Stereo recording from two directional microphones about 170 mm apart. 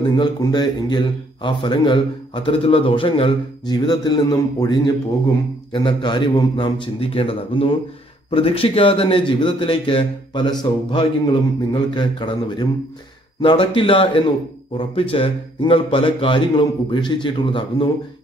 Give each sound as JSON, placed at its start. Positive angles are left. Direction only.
{"t": 0.1, "sound": "a man's voice", "side_deg": 25}